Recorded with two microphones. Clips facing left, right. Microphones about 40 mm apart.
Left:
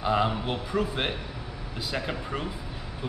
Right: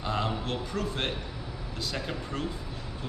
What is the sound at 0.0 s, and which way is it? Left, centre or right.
A man's voice, centre.